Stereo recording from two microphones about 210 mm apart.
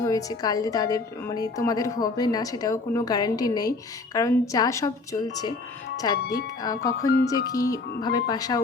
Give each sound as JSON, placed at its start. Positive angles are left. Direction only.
{"t": 0.0, "sound": "a woman's voice", "side_deg": 15}